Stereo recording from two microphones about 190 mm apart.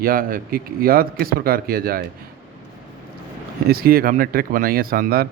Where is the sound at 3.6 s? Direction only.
55° right (ahead or behind).